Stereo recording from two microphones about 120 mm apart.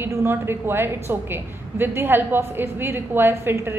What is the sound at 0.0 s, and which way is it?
A woman's voice, 20° right (ahead or behind).